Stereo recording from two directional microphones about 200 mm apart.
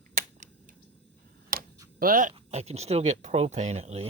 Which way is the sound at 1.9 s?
45° right (ahead or behind).